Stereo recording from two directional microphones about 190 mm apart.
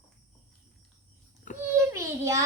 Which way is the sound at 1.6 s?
15° right (ahead or behind).